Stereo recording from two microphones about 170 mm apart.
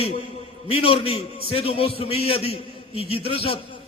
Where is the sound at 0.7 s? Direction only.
35° left (ahead or behind).